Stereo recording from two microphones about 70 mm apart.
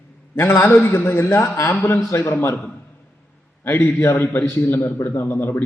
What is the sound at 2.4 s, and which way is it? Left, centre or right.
A man's voice, left.